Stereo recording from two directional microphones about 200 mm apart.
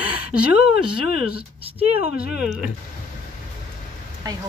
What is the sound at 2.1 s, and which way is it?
Speech, 5° right (ahead or behind).